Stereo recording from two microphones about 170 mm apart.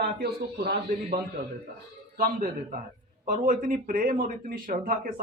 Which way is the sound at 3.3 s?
45° right (ahead or behind).